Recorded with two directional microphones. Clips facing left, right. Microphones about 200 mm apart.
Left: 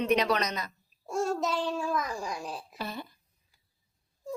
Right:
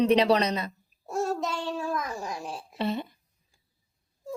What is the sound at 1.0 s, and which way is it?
Babbling, centre (ahead or behind).